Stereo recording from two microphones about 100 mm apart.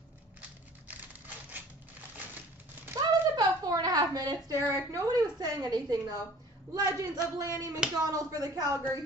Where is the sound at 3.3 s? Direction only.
40° right (ahead or behind).